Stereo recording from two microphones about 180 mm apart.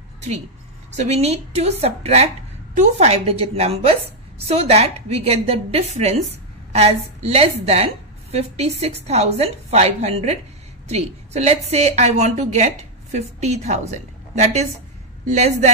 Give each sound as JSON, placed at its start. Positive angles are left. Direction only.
{"t": 0.9, "sound": "a woman's voice", "side_deg": -35}